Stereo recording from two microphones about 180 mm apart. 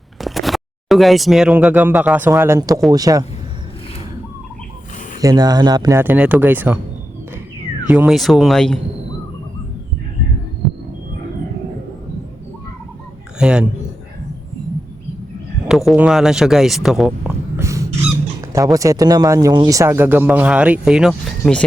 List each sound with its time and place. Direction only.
0.2 s speech: centre (ahead or behind); by 3.2 s 20° right (ahead or behind)
5.2 s speech: 20° right (ahead or behind)
7.9 s speech: 5° right (ahead or behind)
13.4 s speech: 5° right (ahead or behind)
15.6 s speech: centre (ahead or behind)
17.6 s a sound: 15° right (ahead or behind)
18.5 s speech: 20° right (ahead or behind); by 21.6 s centre (ahead or behind)